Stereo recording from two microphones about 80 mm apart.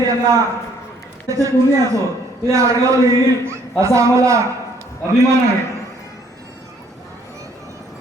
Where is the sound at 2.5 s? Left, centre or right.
Right.